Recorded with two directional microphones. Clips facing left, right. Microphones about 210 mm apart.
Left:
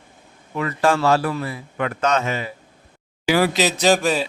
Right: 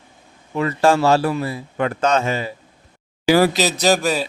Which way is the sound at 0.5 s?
30° right (ahead or behind).